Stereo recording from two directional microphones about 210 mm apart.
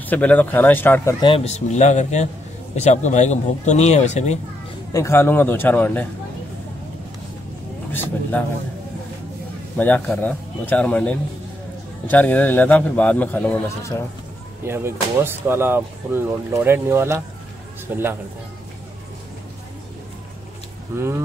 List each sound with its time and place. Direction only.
0.0 s a man's voice: 5° left (ahead or behind)
1.2 s speech: 25° left (ahead or behind)
4.9 s a man's voice: 15° left (ahead or behind)
7.9 s a man's voice: 10° left (ahead or behind)
9.8 s a man's voice: 5° left (ahead or behind)
14.6 s speech: 10° right (ahead or behind)
20.9 s speech: 10° right (ahead or behind)